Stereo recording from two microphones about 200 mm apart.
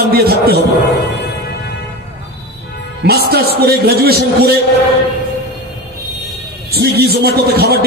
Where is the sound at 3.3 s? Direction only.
55° right (ahead or behind).